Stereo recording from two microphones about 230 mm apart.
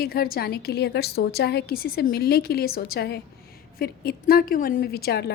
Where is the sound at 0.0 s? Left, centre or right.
Left.